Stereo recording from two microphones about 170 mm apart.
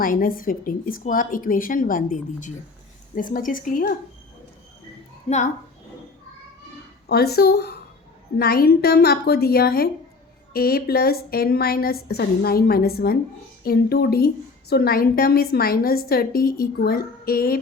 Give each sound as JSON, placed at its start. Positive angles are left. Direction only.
{"t": 0.0, "sound": "speech", "side_deg": 55}
{"t": 5.3, "sound": "a woman's voice", "side_deg": 35}
{"t": 7.1, "sound": "a woman's voice", "side_deg": 70}